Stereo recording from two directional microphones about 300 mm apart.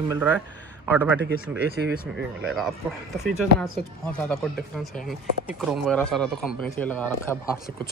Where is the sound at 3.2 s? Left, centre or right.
Centre.